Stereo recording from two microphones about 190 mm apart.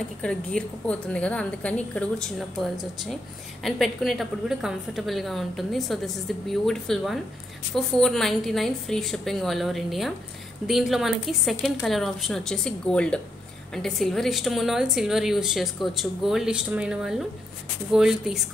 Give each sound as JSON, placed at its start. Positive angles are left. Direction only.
{"t": 0.2, "sound": "a woman's voice", "side_deg": 5}